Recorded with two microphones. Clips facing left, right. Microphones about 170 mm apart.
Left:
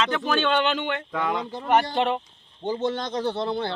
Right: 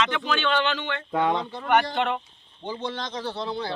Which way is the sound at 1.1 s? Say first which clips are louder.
Right 6 dB; 30° right (ahead or behind).